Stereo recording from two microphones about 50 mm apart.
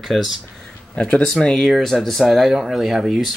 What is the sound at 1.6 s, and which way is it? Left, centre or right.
Speech, centre.